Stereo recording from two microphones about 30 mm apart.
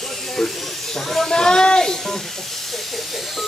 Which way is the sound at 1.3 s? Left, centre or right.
Left.